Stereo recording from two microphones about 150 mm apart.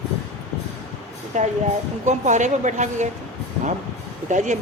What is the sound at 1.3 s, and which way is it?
A woman's voice, 55° right (ahead or behind).